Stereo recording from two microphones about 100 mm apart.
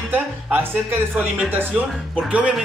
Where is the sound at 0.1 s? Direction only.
20° right (ahead or behind).